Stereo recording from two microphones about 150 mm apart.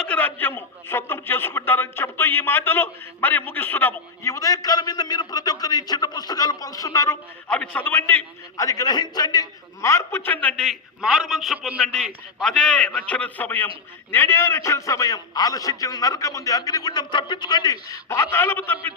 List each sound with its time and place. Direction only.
0.0 s a man's voice: 10° left (ahead or behind)
7.4 s a man's voice: 5° left (ahead or behind)